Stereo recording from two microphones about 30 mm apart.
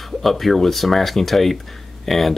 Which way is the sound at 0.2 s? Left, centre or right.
Centre.